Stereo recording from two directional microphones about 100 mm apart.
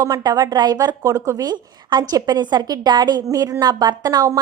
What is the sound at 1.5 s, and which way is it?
A woman's voice, 45° right (ahead or behind).